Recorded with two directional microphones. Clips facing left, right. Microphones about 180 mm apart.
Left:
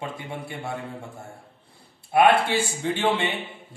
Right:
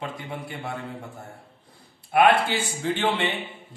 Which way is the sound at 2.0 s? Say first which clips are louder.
Left 1 dB; 30° left (ahead or behind).